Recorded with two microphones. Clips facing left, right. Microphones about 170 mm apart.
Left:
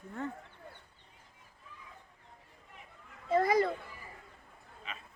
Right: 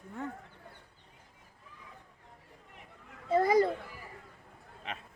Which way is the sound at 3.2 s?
25° right (ahead or behind).